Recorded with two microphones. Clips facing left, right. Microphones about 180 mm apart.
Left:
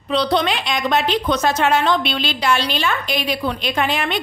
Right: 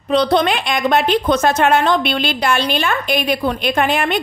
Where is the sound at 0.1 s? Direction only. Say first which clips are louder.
Right 4 dB; 50° right (ahead or behind).